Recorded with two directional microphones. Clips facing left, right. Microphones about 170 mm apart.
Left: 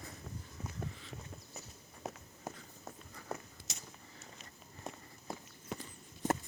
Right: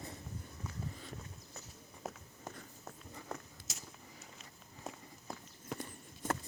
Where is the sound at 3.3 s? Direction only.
Centre (ahead or behind).